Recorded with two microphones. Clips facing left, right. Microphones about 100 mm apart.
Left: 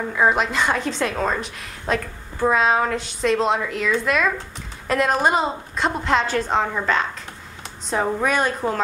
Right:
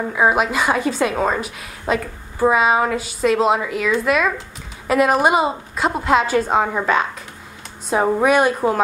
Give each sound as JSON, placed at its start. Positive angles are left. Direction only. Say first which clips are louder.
{"t": 0.1, "sound": "a woman's voice", "louder": "right 2 dB", "side_deg": -5}
{"t": 7.9, "sound": "a woman's voice", "louder": "right 5 dB", "side_deg": -10}